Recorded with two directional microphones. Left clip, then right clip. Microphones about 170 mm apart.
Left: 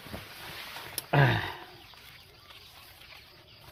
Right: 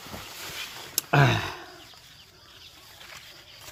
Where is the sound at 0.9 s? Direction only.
40° right (ahead or behind).